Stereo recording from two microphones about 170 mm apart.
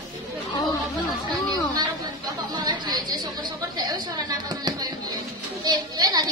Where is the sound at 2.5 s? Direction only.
25° right (ahead or behind).